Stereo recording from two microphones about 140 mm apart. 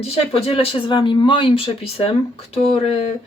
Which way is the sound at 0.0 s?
45° left (ahead or behind).